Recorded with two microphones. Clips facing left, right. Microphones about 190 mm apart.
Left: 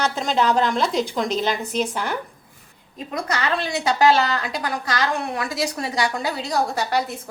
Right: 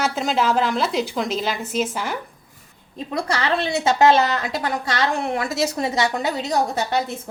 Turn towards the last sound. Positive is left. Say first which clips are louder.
# right 1 dB
turn(degrees=-20)  # may be behind; listen again after turning